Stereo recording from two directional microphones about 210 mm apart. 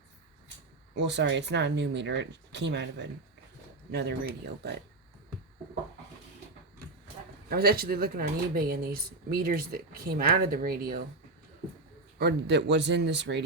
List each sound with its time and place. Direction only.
0.9 s speech: 55° right (ahead or behind)
7.5 s speech: 45° right (ahead or behind)
12.2 s speech: 55° right (ahead or behind)